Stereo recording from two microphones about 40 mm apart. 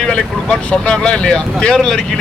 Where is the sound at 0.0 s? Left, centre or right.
Centre.